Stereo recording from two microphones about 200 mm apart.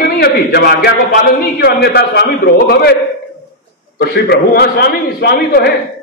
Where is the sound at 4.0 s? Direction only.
50° left (ahead or behind).